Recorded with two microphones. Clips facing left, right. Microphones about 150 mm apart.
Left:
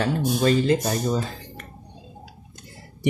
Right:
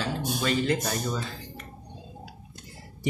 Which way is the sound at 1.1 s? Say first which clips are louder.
Left 7 dB; 45° left (ahead or behind).